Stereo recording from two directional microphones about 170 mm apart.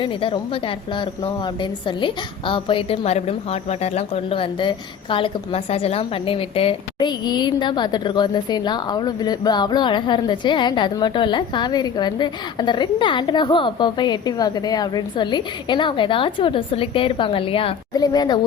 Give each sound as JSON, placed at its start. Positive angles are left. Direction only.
{"t": 0.0, "sound": "a woman's voice", "side_deg": 30}